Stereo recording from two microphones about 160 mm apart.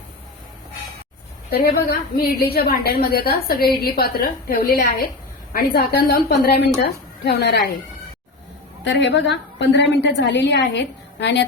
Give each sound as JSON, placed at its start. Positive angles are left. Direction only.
{"t": 1.5, "sound": "a woman's voice", "side_deg": 80}
{"t": 7.3, "sound": "a woman's voice", "side_deg": 90}
{"t": 8.9, "sound": "a woman's voice", "side_deg": 90}